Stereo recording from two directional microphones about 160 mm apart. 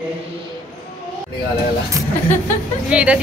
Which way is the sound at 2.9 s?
5° right (ahead or behind).